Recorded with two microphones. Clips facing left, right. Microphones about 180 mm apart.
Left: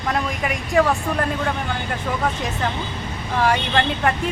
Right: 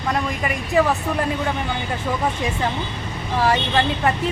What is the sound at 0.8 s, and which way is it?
Speech, 5° right (ahead or behind).